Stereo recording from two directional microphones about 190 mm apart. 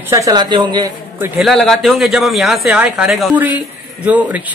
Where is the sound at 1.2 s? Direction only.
Centre (ahead or behind).